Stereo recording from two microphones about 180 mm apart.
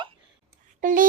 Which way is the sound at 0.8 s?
50° right (ahead or behind).